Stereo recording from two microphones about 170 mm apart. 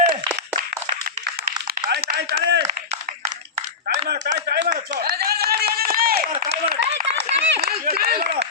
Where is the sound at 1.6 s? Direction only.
70° right (ahead or behind); by 2.7 s 90° right.